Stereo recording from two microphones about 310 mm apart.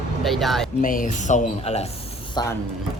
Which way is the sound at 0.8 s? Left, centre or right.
Left.